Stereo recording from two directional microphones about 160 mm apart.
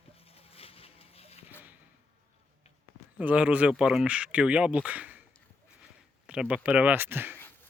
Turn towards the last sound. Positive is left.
turn(degrees=-15)  # may be behind; listen again after turning